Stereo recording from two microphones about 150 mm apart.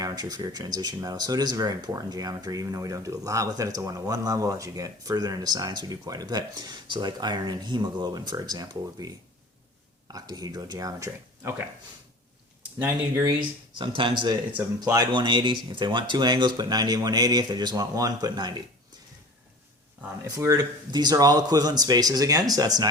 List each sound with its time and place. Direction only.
0.0 s speech: 25° right (ahead or behind)
12.8 s speech: 20° right (ahead or behind)
13.4 s speech: 30° right (ahead or behind)
14.5 s speech: 15° right (ahead or behind)
20.2 s speech: 25° right (ahead or behind)